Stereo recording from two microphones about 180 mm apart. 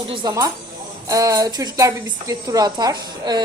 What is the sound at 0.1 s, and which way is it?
A woman's voice, 25° right (ahead or behind).